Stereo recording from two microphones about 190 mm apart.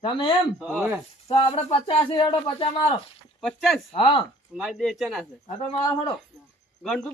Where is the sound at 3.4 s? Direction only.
Centre (ahead or behind).